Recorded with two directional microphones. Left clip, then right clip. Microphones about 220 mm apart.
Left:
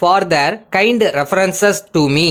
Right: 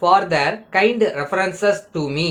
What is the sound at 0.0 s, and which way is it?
Speech, 50° left (ahead or behind).